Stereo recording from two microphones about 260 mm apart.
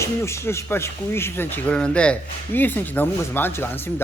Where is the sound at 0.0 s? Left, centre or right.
Centre.